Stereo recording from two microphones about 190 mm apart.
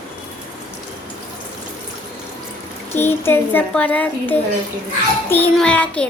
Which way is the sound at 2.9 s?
10° left (ahead or behind).